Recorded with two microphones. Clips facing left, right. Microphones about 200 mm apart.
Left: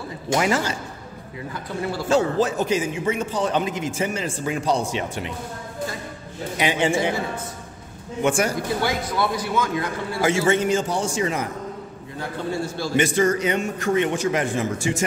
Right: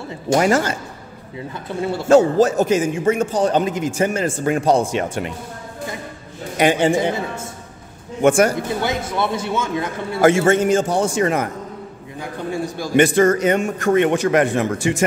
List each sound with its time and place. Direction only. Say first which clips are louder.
0.3 s a man's voice: right 5 dB; 45° right (ahead or behind)
2.0 s a man's voice: right 7 dB; 45° right (ahead or behind)
6.6 s a man's voice: right 6 dB; 45° right (ahead or behind)
8.2 s a man's voice: right 7 dB; 55° right (ahead or behind)
8.8 s a man's voice: right 2 dB; 25° right (ahead or behind)
10.2 s a man's voice: right 6 dB; 55° right (ahead or behind)
12.2 s a man's voice: right 2 dB; 15° right (ahead or behind)
12.9 s a man's voice: right 6 dB; 60° right (ahead or behind)